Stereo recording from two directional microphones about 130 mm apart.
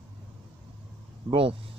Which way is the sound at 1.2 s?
45° right (ahead or behind).